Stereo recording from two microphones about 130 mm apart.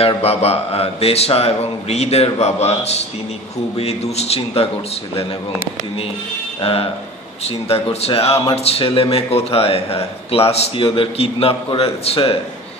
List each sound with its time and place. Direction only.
0.0 s speech: 50° left (ahead or behind)
6.6 s speech: 45° left (ahead or behind)